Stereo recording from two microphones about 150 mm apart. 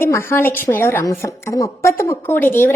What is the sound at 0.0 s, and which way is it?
A woman's voice, 15° left (ahead or behind).